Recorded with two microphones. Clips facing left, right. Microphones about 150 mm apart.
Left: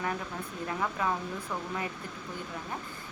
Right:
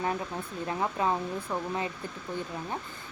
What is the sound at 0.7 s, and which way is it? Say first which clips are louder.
Speech: right 3 dB; 25° right (ahead or behind).